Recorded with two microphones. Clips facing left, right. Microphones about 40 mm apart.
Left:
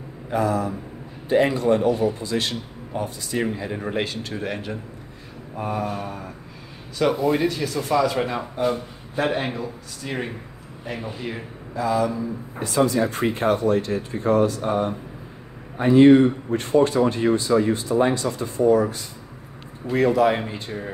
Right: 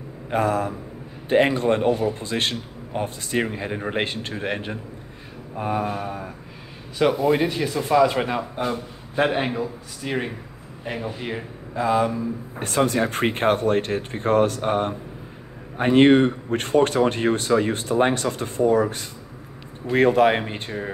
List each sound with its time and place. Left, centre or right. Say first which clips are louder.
0.3 s a man's voice: right 1 dB; right
5.6 s speech: right 2 dB; right
8.6 s a man's voice: left 3 dB; right
9.6 s speech: right 3 dB; centre
11.1 s speech: right 1 dB; right